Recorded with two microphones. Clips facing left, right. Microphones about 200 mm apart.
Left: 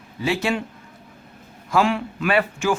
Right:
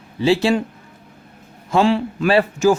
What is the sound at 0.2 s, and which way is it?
Speech, 30° right (ahead or behind).